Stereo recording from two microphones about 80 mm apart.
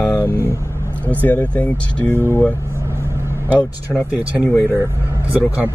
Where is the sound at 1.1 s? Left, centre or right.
Left.